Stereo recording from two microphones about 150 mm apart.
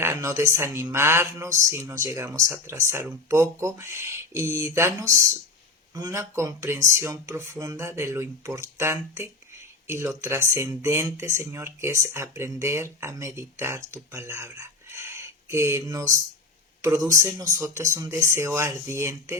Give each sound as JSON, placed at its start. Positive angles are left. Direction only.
{"t": 0.0, "sound": "speech", "side_deg": -15}